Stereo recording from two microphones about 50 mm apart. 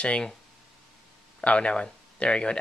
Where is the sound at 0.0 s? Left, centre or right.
Centre.